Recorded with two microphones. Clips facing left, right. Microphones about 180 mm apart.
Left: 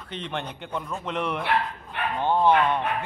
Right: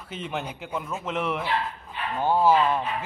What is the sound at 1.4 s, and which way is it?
Dog, 60° left (ahead or behind).